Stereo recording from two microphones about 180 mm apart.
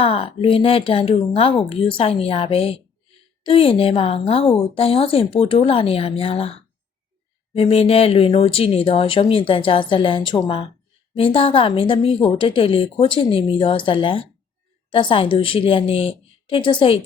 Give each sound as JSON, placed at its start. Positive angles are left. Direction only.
{"t": 0.0, "sound": "a woman's voice", "side_deg": 30}